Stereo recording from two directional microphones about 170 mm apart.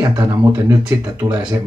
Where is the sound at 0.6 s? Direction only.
5° right (ahead or behind).